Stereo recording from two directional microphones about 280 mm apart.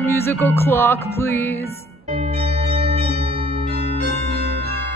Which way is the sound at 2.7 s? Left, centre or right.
Right.